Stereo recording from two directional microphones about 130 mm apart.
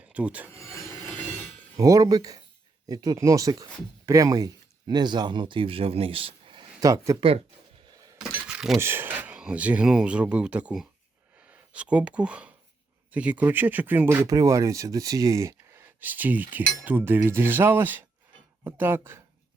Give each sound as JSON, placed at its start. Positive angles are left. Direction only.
{"t": 0.1, "sound": "filing", "side_deg": -10}
{"t": 0.5, "sound": "rub", "side_deg": 25}
{"t": 1.7, "sound": "speech", "side_deg": -25}
{"t": 7.2, "sound": "speech", "side_deg": -45}
{"t": 8.4, "sound": "a sound", "side_deg": -5}
{"t": 8.8, "sound": "speech", "side_deg": -15}